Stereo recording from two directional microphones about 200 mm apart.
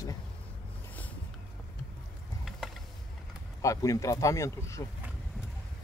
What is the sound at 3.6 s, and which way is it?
Speech, 15° left (ahead or behind).